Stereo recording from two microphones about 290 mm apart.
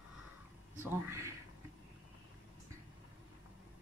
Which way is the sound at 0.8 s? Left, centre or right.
Centre.